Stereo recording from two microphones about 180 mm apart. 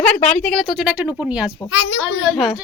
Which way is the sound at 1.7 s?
90° left.